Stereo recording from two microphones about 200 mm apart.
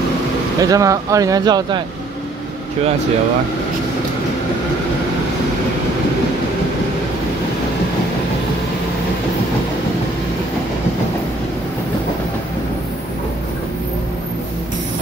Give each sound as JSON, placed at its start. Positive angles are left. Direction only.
{"t": 0.6, "sound": "speech", "side_deg": -15}